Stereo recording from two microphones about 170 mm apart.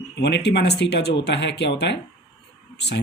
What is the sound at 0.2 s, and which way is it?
Speech, 75° left (ahead or behind).